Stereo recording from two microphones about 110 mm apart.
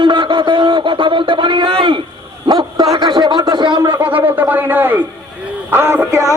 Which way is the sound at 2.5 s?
40° right (ahead or behind).